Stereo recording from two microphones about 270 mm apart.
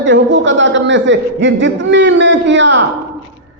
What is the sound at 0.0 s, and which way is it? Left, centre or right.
A man's voice, right.